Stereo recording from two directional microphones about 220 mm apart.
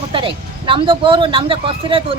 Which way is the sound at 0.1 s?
25° right (ahead or behind).